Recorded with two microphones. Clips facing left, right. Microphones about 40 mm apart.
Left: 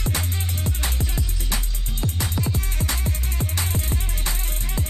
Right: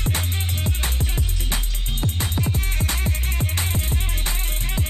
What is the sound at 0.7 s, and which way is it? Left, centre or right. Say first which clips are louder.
Music: right 1 dB; right.